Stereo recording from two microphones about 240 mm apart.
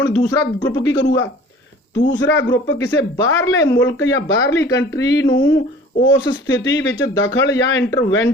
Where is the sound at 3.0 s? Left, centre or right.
Left.